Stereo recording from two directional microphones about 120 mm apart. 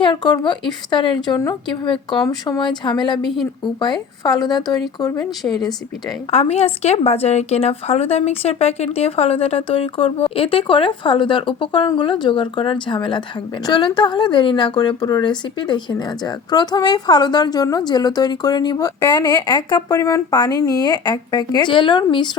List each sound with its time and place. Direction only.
0.0 s a woman's voice: 40° left (ahead or behind)
6.3 s a woman's voice: 60° left (ahead or behind); by 20.0 s 35° left (ahead or behind)
20.0 s a woman's voice: 25° left (ahead or behind)